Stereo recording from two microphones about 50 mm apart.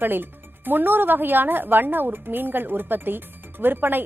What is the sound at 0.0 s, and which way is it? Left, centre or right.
A woman's voice, right.